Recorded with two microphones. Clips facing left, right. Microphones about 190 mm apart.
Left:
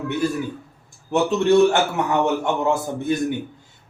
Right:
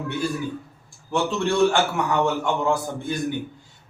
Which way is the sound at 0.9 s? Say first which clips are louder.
Left 4 dB; 20° left (ahead or behind).